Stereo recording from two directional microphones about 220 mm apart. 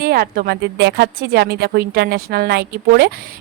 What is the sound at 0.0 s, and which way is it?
A woman's voice, 45° right (ahead or behind).